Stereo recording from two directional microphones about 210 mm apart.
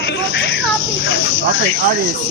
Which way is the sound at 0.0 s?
55° left (ahead or behind).